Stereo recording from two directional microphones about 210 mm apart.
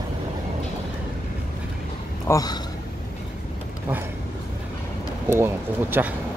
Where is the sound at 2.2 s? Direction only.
15° left (ahead or behind).